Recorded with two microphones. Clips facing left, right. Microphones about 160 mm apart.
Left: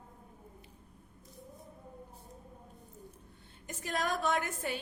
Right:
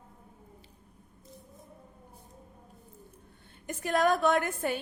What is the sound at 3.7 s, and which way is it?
A woman's voice, 55° right (ahead or behind).